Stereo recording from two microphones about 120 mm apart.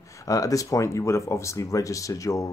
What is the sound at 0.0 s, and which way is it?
Speech, 25° left (ahead or behind).